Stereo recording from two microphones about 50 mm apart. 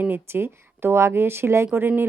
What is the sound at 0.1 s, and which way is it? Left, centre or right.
Speech, right.